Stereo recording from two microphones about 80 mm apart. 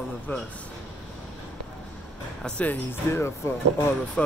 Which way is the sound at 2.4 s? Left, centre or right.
Centre.